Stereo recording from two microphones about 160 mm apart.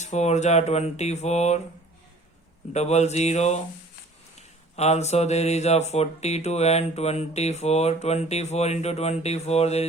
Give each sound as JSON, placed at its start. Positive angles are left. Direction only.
{"t": 0.0, "sound": "speech", "side_deg": 45}
{"t": 2.7, "sound": "speech", "side_deg": 45}